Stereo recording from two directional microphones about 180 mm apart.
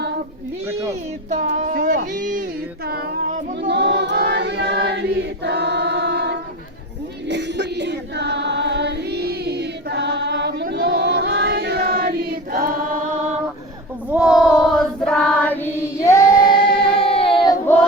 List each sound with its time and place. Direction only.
1.3 s a sound: 40° right (ahead or behind)
2.8 s female singing: 60° right (ahead or behind)
3.7 s choir: 70° right (ahead or behind)
7.3 s music: 75° right (ahead or behind); by 12.5 s 60° right (ahead or behind)
14.1 s child singing: 5° right (ahead or behind); by 16.6 s 20° left (ahead or behind)
17.0 s child singing: 30° left (ahead or behind)